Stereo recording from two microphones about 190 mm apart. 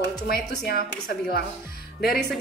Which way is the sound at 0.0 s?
60° left (ahead or behind).